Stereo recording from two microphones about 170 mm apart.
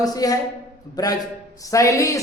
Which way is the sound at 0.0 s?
20° left (ahead or behind).